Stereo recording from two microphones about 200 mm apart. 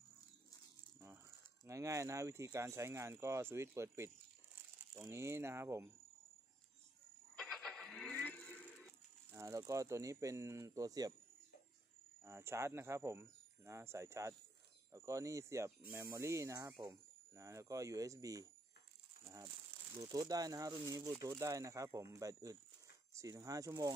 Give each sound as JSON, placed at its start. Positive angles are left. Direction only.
{"t": 1.7, "sound": "speech", "side_deg": -15}
{"t": 7.3, "sound": "music", "side_deg": 0}
{"t": 9.3, "sound": "speech", "side_deg": -15}
{"t": 12.3, "sound": "speech", "side_deg": -15}
{"t": 19.2, "sound": "crumpling", "side_deg": -15}
{"t": 20.0, "sound": "speech", "side_deg": -20}